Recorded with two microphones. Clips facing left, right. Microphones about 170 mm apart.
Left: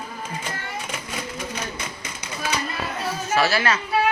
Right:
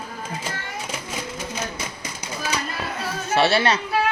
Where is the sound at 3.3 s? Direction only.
30° right (ahead or behind).